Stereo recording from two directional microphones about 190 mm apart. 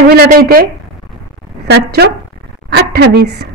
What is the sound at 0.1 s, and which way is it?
Speech, 55° right (ahead or behind).